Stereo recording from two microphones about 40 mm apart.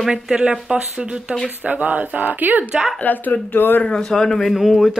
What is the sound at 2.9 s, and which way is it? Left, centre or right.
Speech, left.